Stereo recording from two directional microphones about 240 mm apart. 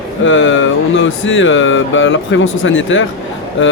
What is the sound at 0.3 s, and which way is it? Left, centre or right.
Speech, left.